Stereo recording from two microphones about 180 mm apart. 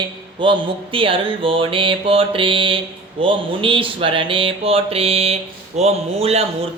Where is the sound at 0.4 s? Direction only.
30° right (ahead or behind).